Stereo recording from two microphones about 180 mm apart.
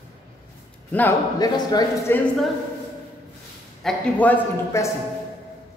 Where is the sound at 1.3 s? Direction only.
20° left (ahead or behind).